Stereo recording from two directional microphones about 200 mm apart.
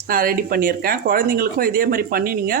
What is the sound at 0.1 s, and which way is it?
Speech, 45° right (ahead or behind).